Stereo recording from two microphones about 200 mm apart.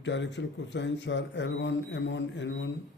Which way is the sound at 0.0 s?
65° left (ahead or behind).